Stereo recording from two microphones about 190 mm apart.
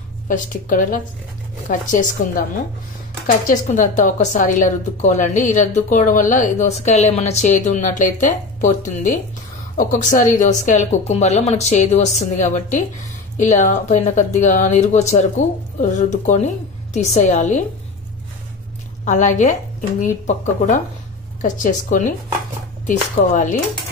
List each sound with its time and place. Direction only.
0.3 s speech: 45° left (ahead or behind)
19.0 s speech: 40° left (ahead or behind)